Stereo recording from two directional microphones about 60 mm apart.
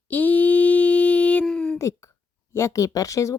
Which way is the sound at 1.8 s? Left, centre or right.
Left.